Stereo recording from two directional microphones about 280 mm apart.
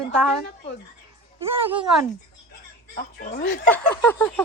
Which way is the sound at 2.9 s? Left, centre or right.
Left.